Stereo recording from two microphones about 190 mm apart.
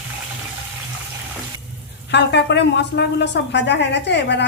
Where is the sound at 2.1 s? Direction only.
65° left (ahead or behind).